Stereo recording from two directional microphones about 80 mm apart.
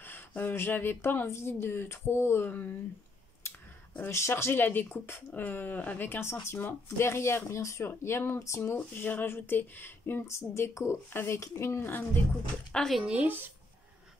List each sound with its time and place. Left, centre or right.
0.0 s speech: left
4.1 s speech: left
8.7 s speech: left
12.7 s speech: centre
13.0 s speech: centre